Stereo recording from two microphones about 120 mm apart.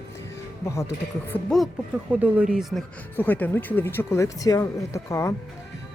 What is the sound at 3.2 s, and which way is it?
Speech, 15° left (ahead or behind).